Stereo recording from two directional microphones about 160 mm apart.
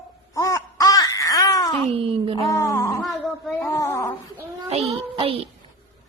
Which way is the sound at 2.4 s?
20° left (ahead or behind).